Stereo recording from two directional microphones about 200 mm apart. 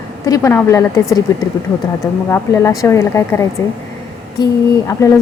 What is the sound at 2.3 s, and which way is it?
A woman's voice, 15° left (ahead or behind).